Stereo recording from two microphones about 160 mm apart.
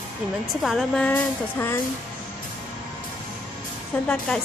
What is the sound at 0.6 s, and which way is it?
A woman's voice, centre (ahead or behind).